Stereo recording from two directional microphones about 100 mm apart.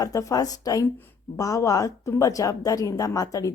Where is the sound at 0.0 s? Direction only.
35° left (ahead or behind).